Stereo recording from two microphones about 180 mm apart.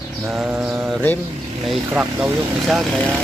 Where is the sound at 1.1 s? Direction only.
10° left (ahead or behind).